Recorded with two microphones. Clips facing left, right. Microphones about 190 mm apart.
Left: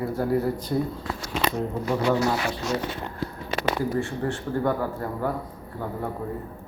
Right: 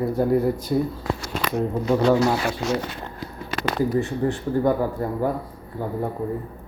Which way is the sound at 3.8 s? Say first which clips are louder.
Right 4 dB; 20° right (ahead or behind).